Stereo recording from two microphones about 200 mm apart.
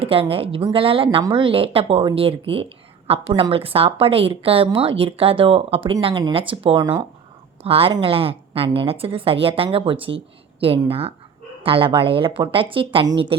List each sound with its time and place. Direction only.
0.0 s a woman's voice: 30° right (ahead or behind)